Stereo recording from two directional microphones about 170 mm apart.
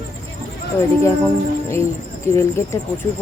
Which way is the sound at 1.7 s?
15° left (ahead or behind).